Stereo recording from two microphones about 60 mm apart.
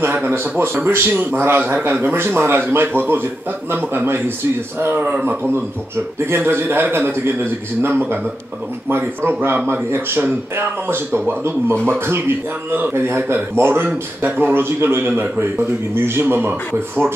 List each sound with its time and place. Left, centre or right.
0.0 s a man's voice: right
6.2 s a man's voice: right